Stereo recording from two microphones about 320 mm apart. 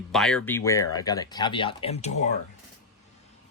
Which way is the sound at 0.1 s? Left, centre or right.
Centre.